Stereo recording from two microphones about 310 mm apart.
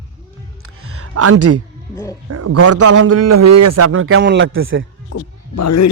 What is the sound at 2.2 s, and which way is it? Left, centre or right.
A man's voice, right.